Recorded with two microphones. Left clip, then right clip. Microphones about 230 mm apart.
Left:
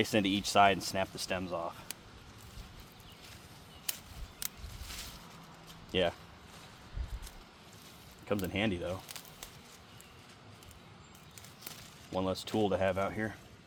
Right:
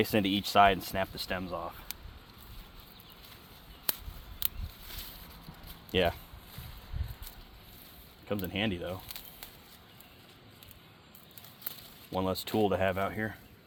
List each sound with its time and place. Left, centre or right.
0.0 s speech: right
5.9 s speech: right
8.3 s speech: right
9.0 s a sound: centre
12.1 s speech: right